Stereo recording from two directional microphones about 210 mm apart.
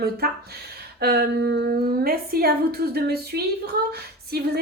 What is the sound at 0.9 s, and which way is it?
A woman's voice, 50° right (ahead or behind).